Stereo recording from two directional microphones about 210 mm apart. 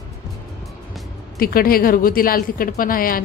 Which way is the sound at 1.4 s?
45° left (ahead or behind).